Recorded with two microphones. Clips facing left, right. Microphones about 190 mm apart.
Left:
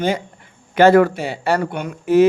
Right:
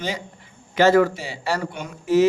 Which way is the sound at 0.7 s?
60° left (ahead or behind).